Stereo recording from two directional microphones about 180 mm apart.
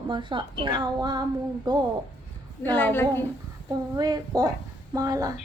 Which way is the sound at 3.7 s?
20° right (ahead or behind).